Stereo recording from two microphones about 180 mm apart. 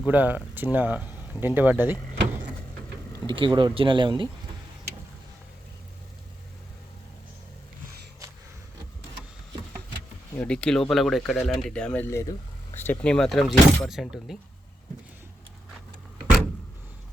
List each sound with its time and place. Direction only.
0.0 s speech: 10° right (ahead or behind)
3.2 s speech: 25° right (ahead or behind)
10.3 s speech: 5° left (ahead or behind)